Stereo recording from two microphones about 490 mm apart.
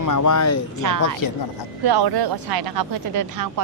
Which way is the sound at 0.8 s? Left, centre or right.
Right.